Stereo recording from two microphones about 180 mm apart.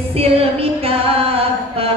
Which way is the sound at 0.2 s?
35° right (ahead or behind).